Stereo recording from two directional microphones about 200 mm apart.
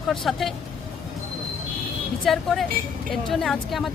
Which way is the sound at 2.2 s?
Centre (ahead or behind).